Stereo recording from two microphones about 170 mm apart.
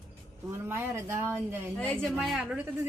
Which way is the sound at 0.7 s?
15° right (ahead or behind).